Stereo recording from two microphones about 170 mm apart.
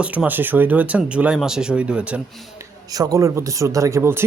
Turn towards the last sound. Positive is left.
turn(degrees=-15)  # may be behind; listen again after turning